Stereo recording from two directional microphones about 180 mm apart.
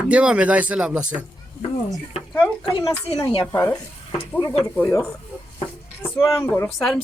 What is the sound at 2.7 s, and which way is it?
Speech, 25° left (ahead or behind).